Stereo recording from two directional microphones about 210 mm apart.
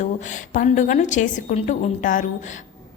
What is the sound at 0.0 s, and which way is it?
A woman's voice, 35° left (ahead or behind).